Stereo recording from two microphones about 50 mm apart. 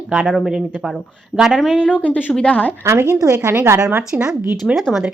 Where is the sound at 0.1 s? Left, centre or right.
Right.